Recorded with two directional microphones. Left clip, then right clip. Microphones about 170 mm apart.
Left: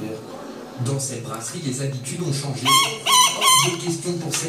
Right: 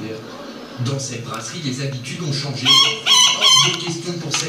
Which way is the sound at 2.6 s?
25° left (ahead or behind).